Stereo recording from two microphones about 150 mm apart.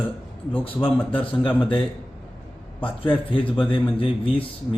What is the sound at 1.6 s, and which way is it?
Speech, 35° left (ahead or behind).